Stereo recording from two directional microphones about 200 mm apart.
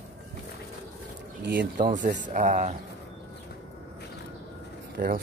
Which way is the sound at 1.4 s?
60° right (ahead or behind).